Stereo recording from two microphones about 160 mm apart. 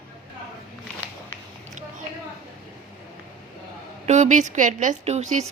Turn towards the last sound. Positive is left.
turn(degrees=-45)  # may be behind; listen again after turning